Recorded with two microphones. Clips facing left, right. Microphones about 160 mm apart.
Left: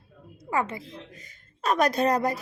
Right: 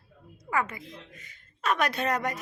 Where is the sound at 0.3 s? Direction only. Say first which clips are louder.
Left 2 dB; 30° left (ahead or behind).